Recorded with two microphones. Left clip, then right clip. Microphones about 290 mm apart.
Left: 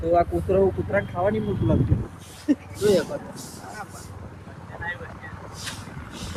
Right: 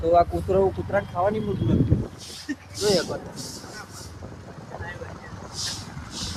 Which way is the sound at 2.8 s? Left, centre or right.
Right.